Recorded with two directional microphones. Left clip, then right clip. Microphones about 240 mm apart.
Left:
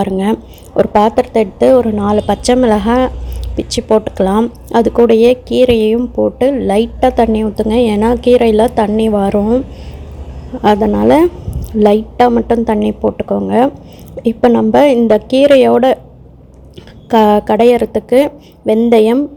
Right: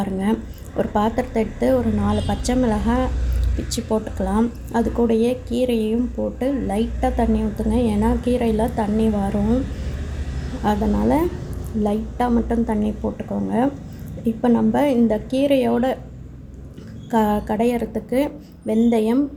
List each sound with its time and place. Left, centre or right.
0.0 s a woman's voice: left
10.6 s a woman's voice: left
17.1 s a woman's voice: left